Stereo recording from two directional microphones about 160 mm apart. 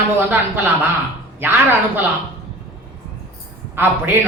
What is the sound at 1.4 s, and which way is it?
Speech, 15° right (ahead or behind).